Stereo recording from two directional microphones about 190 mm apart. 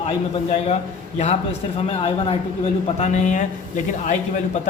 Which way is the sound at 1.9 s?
30° left (ahead or behind).